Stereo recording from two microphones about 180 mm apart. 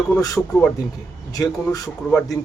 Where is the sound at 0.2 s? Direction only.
20° left (ahead or behind).